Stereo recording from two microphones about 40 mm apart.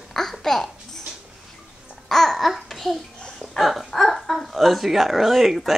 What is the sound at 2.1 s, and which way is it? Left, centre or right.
Babbling, centre.